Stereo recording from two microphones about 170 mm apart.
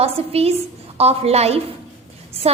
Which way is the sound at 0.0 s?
35° right (ahead or behind).